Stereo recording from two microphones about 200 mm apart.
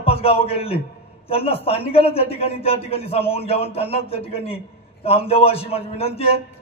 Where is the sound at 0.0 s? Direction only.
30° left (ahead or behind).